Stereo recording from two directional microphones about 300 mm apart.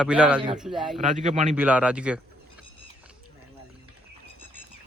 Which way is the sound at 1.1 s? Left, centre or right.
Right.